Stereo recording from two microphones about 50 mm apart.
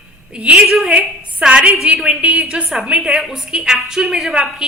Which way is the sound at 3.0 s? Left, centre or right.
Centre.